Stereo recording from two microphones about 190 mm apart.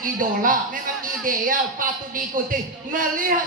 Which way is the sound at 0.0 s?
45° right (ahead or behind).